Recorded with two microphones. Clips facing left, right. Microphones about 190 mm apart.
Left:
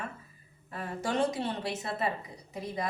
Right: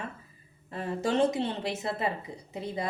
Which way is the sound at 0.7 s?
25° right (ahead or behind).